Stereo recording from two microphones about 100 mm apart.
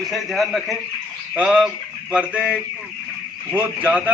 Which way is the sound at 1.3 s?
10° right (ahead or behind).